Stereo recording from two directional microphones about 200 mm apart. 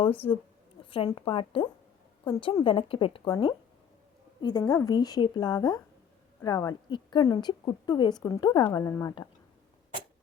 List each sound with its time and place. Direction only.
0.2 s speech: 30° left (ahead or behind)